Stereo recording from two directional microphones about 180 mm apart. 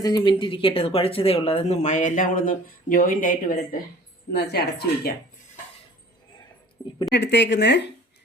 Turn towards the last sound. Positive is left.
turn(degrees=70)  # may be behind; listen again after turning